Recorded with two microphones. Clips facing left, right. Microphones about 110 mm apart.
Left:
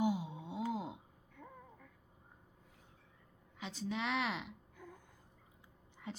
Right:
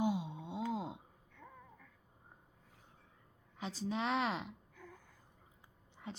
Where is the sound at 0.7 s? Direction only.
25° right (ahead or behind).